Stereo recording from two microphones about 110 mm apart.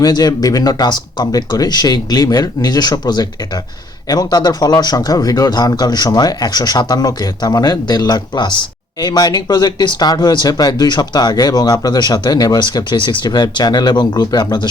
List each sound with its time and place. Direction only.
0.0 s speech: 35° left (ahead or behind)